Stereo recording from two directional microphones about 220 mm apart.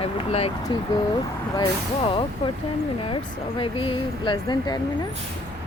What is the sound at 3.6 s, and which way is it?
Speech, 20° left (ahead or behind).